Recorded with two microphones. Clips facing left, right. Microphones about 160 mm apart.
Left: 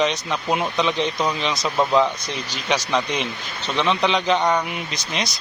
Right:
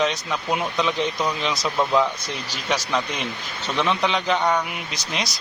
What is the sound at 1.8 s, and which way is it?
Speech, 15° left (ahead or behind).